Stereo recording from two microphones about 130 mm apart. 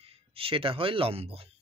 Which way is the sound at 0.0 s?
45° right (ahead or behind).